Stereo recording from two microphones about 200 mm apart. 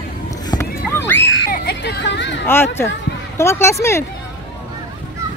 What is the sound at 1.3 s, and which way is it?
Children playing, 60° left (ahead or behind).